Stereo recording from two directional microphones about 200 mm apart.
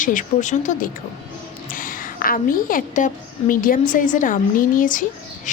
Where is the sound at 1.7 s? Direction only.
45° left (ahead or behind).